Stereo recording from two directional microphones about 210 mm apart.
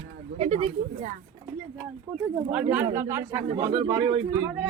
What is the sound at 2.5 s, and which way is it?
Speech, 5° right (ahead or behind).